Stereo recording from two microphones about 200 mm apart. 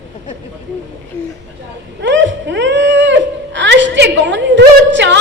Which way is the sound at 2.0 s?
65° right (ahead or behind).